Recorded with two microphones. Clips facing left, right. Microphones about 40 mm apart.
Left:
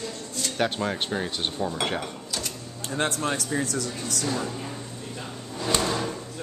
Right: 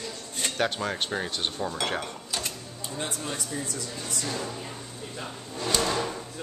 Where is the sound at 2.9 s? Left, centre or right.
Left.